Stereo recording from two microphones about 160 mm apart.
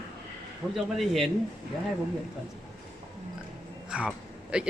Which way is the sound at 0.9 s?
Centre (ahead or behind).